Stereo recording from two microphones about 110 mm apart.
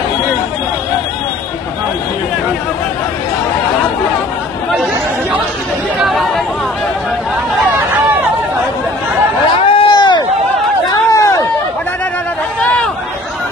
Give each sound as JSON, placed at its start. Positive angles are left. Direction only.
{"t": 6.0, "sound": "chatter", "side_deg": 0}
{"t": 9.6, "sound": "a sound", "side_deg": 55}
{"t": 10.9, "sound": "run", "side_deg": 30}
{"t": 12.6, "sound": "chatter", "side_deg": 10}